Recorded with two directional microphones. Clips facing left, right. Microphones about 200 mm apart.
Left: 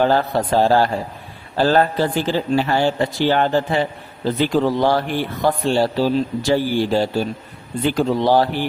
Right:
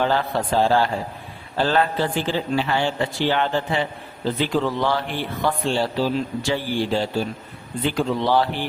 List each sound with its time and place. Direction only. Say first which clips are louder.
0.0 s speech: left 4 dB; 40° left (ahead or behind)